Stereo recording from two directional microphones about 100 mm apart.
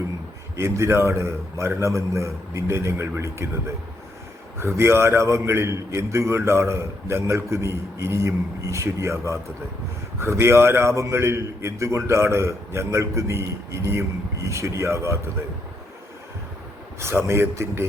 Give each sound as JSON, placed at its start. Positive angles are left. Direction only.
{"t": 0.5, "sound": "a man's voice", "side_deg": -25}
{"t": 4.8, "sound": "a man's voice", "side_deg": -25}
{"t": 17.0, "sound": "a man's voice", "side_deg": -25}